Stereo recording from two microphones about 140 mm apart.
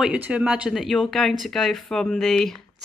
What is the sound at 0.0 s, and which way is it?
Speech, 10° right (ahead or behind).